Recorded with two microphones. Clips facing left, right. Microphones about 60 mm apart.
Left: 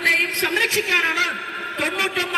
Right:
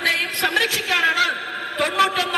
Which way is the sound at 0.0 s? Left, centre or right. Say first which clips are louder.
Left 1 dB; left.